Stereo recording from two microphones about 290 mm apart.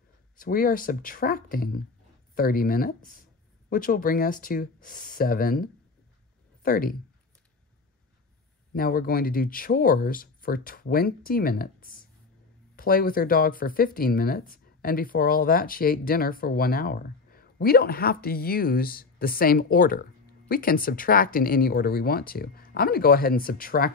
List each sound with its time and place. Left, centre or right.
0.4 s speech: left
8.7 s speech: left